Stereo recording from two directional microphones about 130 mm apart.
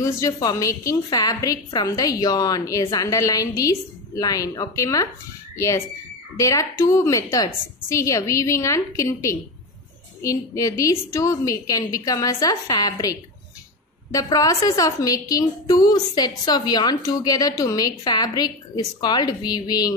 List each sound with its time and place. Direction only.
0.0 s a woman's voice: 25° left (ahead or behind)
6.3 s a woman's voice: 25° left (ahead or behind)